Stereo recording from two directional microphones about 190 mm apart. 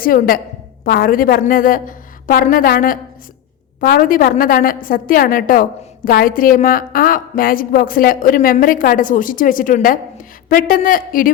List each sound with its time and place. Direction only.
0.0 s a woman's voice: 50° left (ahead or behind)